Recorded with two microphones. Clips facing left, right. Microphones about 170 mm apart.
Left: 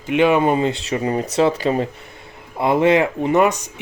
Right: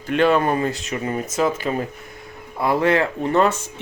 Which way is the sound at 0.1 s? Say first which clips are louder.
Left 2 dB; 15° left (ahead or behind).